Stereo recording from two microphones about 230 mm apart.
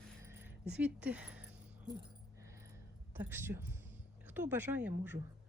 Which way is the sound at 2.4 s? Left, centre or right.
Centre.